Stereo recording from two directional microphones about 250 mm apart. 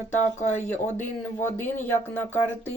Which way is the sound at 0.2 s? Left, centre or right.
Left.